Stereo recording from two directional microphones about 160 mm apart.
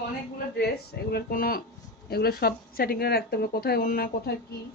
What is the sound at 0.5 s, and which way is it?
Speech, 85° left.